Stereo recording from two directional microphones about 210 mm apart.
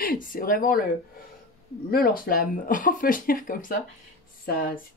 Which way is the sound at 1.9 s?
45° left (ahead or behind).